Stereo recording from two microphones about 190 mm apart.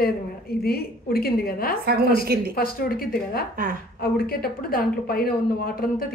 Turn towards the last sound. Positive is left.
turn(degrees=50)  # may be behind; listen again after turning